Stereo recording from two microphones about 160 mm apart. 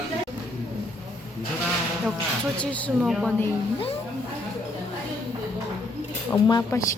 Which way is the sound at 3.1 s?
5° right (ahead or behind).